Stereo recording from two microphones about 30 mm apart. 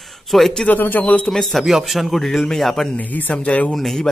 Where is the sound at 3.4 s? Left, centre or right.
Left.